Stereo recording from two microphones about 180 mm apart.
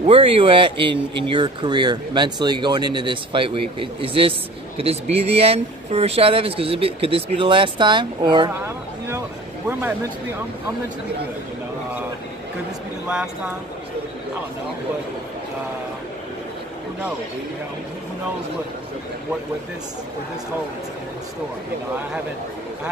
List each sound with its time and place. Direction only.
0.0 s speech: 30° right (ahead or behind)
8.5 s a sound: 15° right (ahead or behind)
9.7 s speech: 10° right (ahead or behind)